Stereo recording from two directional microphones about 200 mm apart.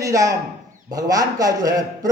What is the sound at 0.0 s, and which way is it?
A man's voice, 15° right (ahead or behind).